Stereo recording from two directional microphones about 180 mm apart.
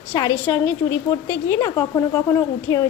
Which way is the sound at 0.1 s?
20° left (ahead or behind).